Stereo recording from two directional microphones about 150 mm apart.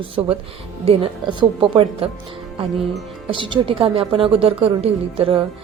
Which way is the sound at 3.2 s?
35° right (ahead or behind).